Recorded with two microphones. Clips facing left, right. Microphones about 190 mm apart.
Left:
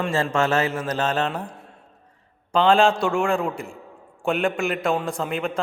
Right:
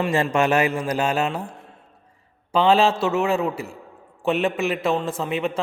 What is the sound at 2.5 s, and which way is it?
A man's voice, 5° right (ahead or behind).